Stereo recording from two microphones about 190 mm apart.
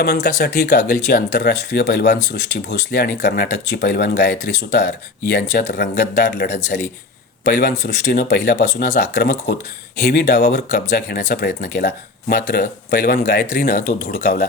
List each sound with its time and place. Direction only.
0.0 s speech: 55° left (ahead or behind)
5.4 s speech: 45° left (ahead or behind)
6.0 s speech: 65° left (ahead or behind)
8.4 s speech: 45° left (ahead or behind)
14.1 s speech: 40° left (ahead or behind)